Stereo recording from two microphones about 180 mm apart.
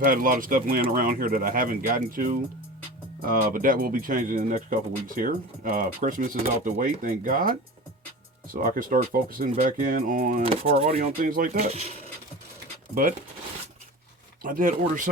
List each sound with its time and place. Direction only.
0.0 s speech: 50° right (ahead or behind)
8.5 s speech: 50° right (ahead or behind)
10.4 s speech: 35° right (ahead or behind)
11.3 s speech: 50° right (ahead or behind)
11.5 s speech: 35° right (ahead or behind)
12.9 s speech: 50° right (ahead or behind)
14.4 s speech: 50° right (ahead or behind)